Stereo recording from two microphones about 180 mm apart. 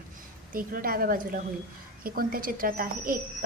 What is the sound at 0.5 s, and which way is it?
A woman's voice, 50° right (ahead or behind).